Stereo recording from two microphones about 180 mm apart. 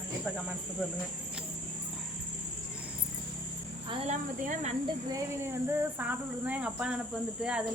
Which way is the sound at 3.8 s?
40° right (ahead or behind).